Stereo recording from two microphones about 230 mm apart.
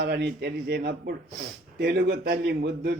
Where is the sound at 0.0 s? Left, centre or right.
Right.